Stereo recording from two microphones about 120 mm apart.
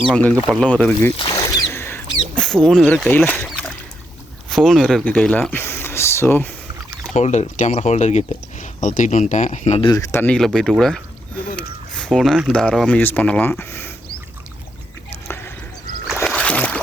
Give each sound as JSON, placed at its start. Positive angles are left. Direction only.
{"t": 0.1, "sound": "speech", "side_deg": 10}
{"t": 1.3, "sound": "a sound", "side_deg": 25}
{"t": 2.3, "sound": "rodents", "side_deg": 5}
{"t": 4.4, "sound": "speech", "side_deg": 0}
{"t": 7.1, "sound": "speech", "side_deg": 75}
{"t": 9.8, "sound": "speech", "side_deg": 35}
{"t": 10.1, "sound": "speech", "side_deg": 15}
{"t": 10.3, "sound": "speech", "side_deg": 5}
{"t": 11.5, "sound": "cat", "side_deg": 5}
{"t": 12.5, "sound": "speech", "side_deg": 5}
{"t": 16.2, "sound": "a sound", "side_deg": 10}